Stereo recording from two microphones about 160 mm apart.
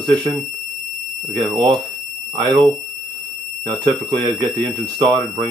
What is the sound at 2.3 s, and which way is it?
Speech, 25° right (ahead or behind).